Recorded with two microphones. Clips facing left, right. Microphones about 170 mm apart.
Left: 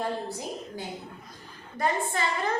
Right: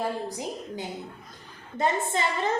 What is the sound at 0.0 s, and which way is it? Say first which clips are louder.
Speech: right 1 dB; 15° right (ahead or behind).